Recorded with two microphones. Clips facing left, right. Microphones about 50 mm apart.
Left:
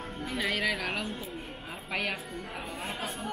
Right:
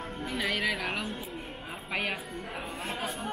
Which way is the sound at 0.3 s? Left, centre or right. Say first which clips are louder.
Even; centre.